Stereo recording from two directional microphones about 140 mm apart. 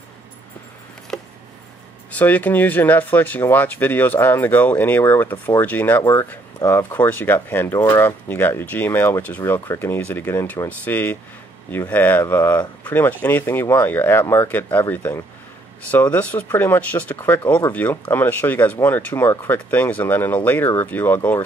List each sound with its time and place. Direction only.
2.0 s speech: 10° left (ahead or behind)